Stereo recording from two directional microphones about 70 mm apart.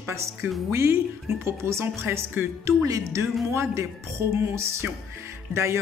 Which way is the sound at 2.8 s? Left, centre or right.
Right.